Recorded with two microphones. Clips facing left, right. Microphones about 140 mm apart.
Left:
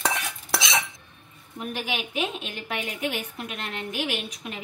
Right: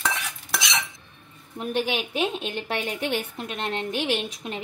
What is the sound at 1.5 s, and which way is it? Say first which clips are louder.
A woman's voice: right 5 dB; 30° right (ahead or behind).